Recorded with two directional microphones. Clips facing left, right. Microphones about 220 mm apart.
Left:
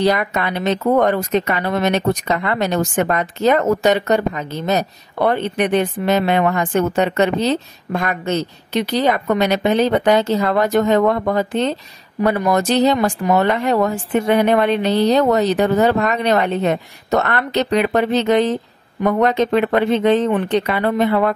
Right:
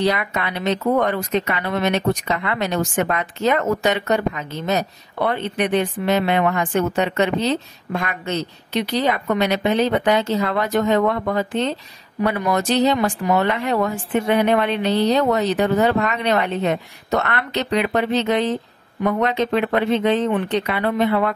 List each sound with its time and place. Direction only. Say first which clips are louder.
0.0 s speech: left 3 dB; 45° left (ahead or behind)